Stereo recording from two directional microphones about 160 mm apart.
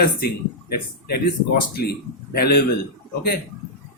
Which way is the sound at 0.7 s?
75° left (ahead or behind).